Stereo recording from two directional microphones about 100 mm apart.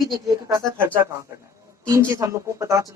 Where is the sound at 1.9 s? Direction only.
35° right (ahead or behind).